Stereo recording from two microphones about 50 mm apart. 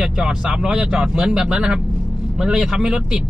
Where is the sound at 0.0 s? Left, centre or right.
Centre.